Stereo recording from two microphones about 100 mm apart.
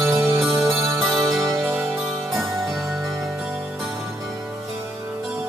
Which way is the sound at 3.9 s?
25° right (ahead or behind).